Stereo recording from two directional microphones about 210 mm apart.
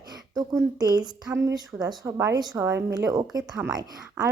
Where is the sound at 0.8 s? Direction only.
20° right (ahead or behind).